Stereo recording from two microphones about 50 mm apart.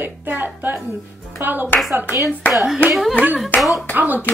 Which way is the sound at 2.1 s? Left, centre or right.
Right.